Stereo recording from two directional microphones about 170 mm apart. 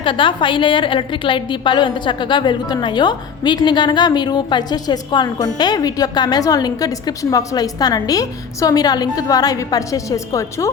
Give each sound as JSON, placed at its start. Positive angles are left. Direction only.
{"t": 0.0, "sound": "a woman's voice", "side_deg": 30}